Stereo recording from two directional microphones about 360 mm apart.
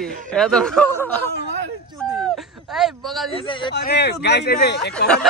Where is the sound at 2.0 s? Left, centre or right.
Centre.